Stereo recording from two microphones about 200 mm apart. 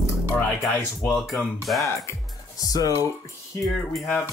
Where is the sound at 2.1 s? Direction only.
20° left (ahead or behind).